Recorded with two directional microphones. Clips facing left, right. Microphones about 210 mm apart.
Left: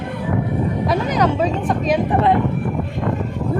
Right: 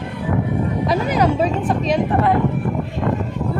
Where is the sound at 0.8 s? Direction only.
10° right (ahead or behind).